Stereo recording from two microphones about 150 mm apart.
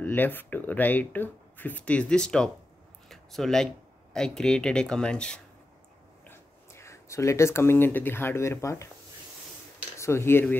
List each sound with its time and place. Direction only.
0.0 s speech: 10° left (ahead or behind)
6.2 s speech: 15° left (ahead or behind)
9.9 s speech: 20° left (ahead or behind)